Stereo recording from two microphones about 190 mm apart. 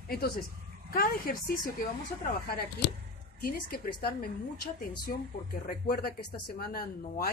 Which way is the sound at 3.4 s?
50° left (ahead or behind).